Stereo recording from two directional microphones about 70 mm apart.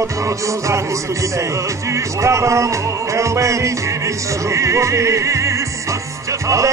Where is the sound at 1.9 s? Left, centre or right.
Right.